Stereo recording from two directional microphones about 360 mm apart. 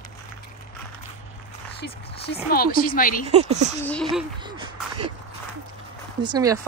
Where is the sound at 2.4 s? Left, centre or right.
Left.